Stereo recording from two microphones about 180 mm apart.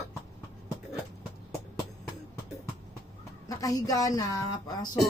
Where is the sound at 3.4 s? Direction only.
20° left (ahead or behind).